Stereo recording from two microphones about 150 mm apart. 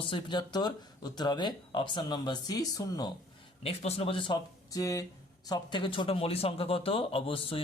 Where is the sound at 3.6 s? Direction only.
40° left (ahead or behind).